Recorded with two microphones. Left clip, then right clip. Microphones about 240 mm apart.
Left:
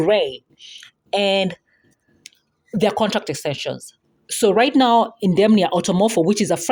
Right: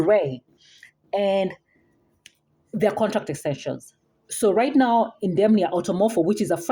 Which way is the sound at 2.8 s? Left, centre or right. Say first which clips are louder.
Left 3 dB; left.